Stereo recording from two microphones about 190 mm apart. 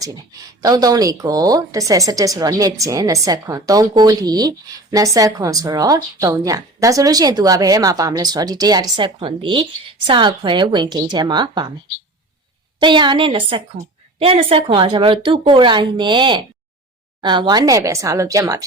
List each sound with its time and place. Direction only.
0.0 s speech: 20° right (ahead or behind)
12.8 s speech: 25° right (ahead or behind)